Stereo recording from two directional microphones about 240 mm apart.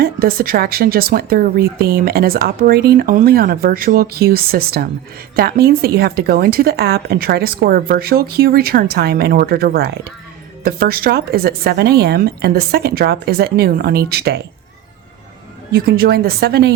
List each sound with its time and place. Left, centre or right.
0.0 s speech: right
15.7 s speech: right